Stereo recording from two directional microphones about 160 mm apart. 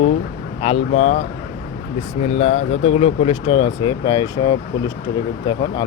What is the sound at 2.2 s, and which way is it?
Speech, 45° left (ahead or behind).